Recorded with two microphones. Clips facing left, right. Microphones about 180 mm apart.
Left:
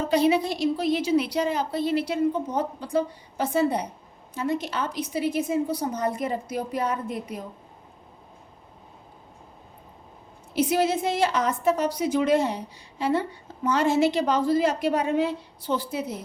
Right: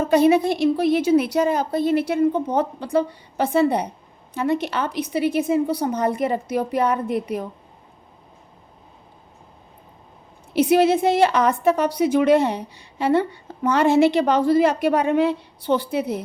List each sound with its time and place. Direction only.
0.0 s a woman's voice: 50° right (ahead or behind); by 7.4 s 70° right (ahead or behind)
10.5 s a woman's voice: 65° right (ahead or behind)